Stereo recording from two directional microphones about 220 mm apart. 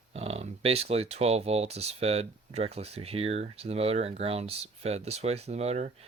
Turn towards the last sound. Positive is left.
turn(degrees=-30)  # may be behind; listen again after turning